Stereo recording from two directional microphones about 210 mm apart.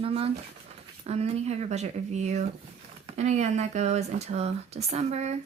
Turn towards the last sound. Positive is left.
turn(degrees=-30)  # may be behind; listen again after turning